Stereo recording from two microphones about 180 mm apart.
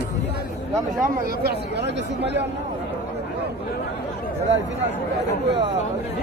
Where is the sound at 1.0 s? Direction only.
55° right (ahead or behind); by 2.4 s 75° right (ahead or behind).